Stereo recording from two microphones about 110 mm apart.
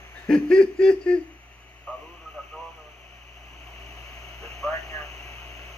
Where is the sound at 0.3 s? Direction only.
10° left (ahead or behind).